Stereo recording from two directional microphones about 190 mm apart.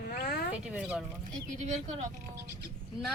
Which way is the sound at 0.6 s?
5° right (ahead or behind).